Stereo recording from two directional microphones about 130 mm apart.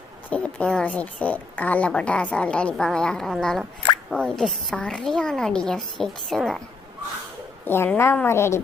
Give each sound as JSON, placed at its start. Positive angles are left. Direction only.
{"t": 0.3, "sound": "a woman's voice", "side_deg": 10}
{"t": 7.6, "sound": "a woman's voice", "side_deg": 15}